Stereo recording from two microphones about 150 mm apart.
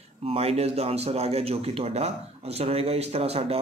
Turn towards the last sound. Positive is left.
turn(degrees=-40)  # may be behind; listen again after turning